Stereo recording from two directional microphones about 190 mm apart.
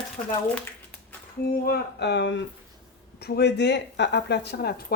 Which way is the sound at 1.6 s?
60° left (ahead or behind).